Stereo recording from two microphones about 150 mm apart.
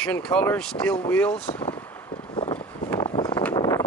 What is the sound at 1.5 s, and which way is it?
Speech, 35° left (ahead or behind).